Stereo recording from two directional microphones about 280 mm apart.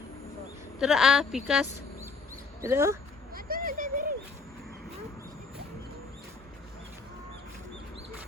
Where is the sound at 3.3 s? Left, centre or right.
Right.